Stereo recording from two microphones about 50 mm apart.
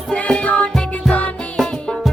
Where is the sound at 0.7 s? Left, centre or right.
Centre.